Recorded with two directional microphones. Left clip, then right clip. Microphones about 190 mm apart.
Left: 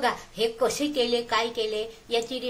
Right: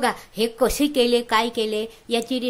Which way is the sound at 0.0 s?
55° right (ahead or behind).